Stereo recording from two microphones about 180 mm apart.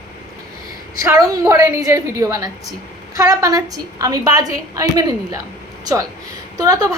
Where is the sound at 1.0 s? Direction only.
20° right (ahead or behind).